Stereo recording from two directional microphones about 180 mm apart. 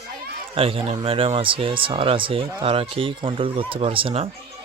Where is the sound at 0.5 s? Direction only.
30° right (ahead or behind).